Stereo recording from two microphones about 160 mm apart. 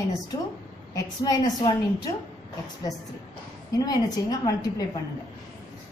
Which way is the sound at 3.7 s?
25° left (ahead or behind).